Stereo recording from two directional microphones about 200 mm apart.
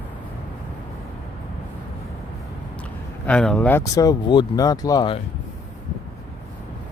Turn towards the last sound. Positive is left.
turn(degrees=20)  # may be behind; listen again after turning